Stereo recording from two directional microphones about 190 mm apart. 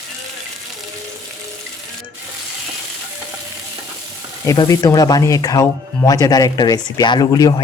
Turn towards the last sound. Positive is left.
turn(degrees=20)  # may be behind; listen again after turning